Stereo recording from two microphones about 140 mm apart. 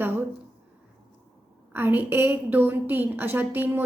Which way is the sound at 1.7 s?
15° right (ahead or behind).